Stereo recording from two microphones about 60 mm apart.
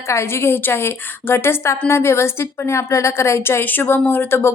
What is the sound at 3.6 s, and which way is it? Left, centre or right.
Speech, left.